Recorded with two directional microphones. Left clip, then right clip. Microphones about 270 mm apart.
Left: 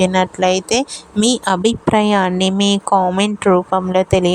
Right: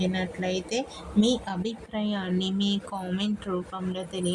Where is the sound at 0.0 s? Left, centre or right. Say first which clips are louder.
Left 16 dB; left.